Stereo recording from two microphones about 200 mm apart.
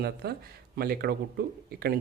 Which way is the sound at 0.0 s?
50° right (ahead or behind).